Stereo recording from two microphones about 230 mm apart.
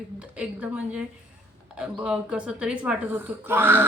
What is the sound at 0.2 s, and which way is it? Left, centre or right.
A woman's voice, centre.